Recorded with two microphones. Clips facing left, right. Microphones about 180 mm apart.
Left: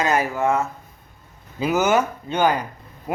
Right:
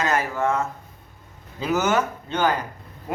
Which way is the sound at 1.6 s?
10° left (ahead or behind).